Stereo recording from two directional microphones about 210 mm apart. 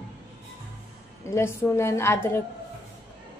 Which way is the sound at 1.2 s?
10° left (ahead or behind).